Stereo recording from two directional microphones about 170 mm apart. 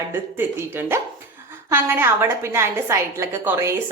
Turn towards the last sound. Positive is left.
turn(degrees=-15)  # may be behind; listen again after turning